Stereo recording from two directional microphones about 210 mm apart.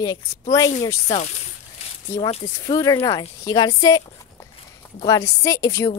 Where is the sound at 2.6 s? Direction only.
15° left (ahead or behind).